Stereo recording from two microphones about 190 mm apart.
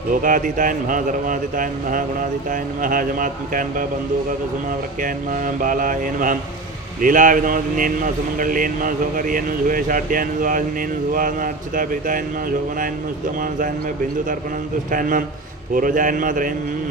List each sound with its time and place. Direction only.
0.1 s speech: 45° right (ahead or behind)
4.9 s speech: 45° right (ahead or behind)
13.4 s speech: 45° right (ahead or behind)